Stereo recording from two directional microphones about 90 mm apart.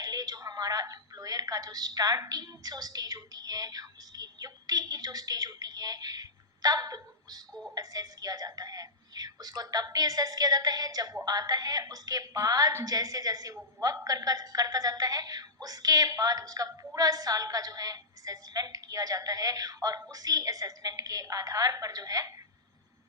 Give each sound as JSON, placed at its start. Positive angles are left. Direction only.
{"t": 0.0, "sound": "a woman's voice", "side_deg": -45}